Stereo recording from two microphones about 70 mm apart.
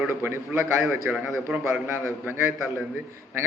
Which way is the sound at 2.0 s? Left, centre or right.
Right.